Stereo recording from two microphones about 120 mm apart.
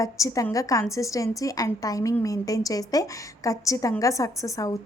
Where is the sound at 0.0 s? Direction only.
25° left (ahead or behind).